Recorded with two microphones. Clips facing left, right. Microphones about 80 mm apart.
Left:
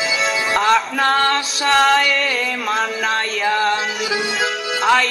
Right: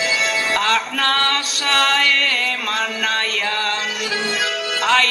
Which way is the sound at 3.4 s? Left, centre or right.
Centre.